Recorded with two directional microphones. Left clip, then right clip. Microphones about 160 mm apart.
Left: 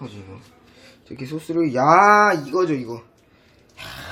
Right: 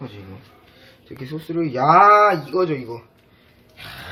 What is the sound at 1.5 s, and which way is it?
Speech, 55° left (ahead or behind).